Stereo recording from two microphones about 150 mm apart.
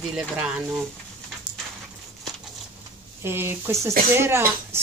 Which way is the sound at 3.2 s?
15° right (ahead or behind).